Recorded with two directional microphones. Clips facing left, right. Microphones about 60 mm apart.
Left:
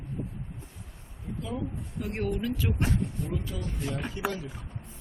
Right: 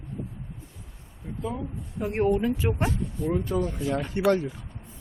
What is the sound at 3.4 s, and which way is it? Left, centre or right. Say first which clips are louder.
Speech: right 10 dB; right.